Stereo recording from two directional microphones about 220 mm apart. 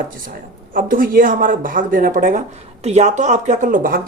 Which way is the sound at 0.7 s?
40° right (ahead or behind).